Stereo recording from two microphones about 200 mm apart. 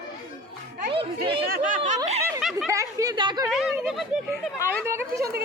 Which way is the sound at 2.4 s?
Centre (ahead or behind).